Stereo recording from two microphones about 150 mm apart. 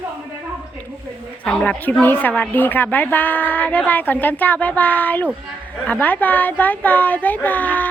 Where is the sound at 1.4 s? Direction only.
5° left (ahead or behind).